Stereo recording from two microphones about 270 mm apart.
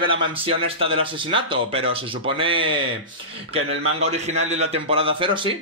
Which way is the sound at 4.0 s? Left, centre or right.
Right.